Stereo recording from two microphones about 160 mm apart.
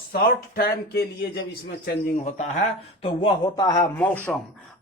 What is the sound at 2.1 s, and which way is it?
Speech, 45° left (ahead or behind).